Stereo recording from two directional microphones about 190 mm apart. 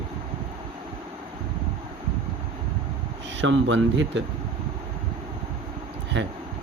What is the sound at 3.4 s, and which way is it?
Speech, 75° right (ahead or behind).